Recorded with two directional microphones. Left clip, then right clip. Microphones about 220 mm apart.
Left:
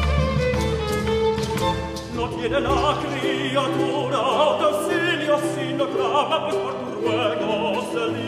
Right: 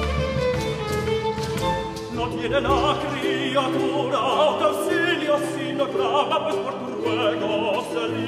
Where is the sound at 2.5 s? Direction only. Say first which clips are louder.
Right 1 dB; 30° right (ahead or behind).